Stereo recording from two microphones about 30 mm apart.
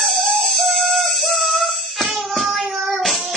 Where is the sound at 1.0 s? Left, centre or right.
Centre.